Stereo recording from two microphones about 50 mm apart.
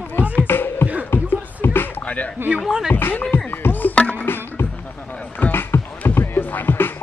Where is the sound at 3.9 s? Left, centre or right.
Left.